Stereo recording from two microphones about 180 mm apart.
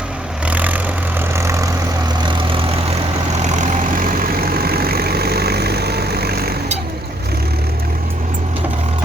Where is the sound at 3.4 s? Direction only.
40° right (ahead or behind); by 6.6 s 60° right (ahead or behind).